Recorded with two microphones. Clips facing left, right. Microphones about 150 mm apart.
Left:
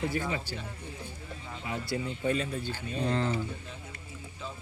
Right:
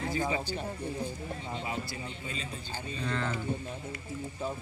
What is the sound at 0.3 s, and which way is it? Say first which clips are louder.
Speech: right 4 dB; 50° right (ahead or behind).